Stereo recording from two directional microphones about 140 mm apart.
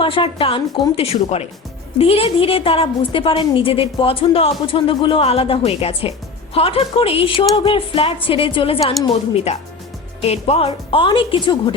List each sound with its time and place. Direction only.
0.0 s a woman's voice: 40° left (ahead or behind)